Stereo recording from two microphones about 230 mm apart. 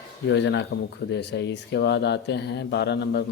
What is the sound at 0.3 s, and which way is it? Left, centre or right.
Speech, left.